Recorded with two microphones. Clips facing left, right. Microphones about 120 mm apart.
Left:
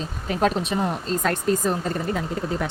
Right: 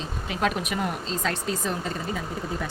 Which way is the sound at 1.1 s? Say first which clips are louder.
Left 6 dB; 50° left (ahead or behind).